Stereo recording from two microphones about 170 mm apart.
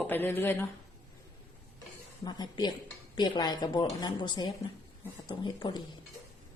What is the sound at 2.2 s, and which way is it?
Speech, 25° left (ahead or behind).